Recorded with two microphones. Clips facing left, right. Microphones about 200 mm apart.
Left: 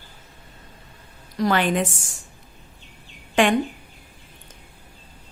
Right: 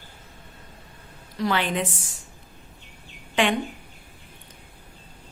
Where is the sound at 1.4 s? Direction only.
45° left (ahead or behind).